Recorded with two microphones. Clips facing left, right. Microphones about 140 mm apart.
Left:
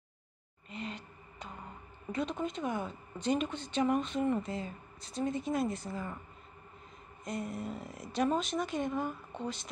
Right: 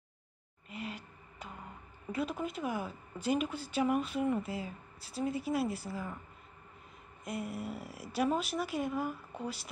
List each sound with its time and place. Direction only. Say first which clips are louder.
0.7 s a sound: left 1 dB; 5° right (ahead or behind)
2.1 s speech: left 1 dB; 5° right (ahead or behind)
7.2 s a woman's voice: left 1 dB; 5° right (ahead or behind)